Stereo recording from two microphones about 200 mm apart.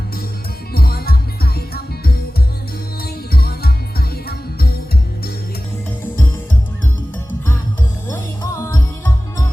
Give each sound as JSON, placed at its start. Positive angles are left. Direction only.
{"t": 0.7, "sound": "music", "side_deg": 50}
{"t": 8.0, "sound": "music", "side_deg": 15}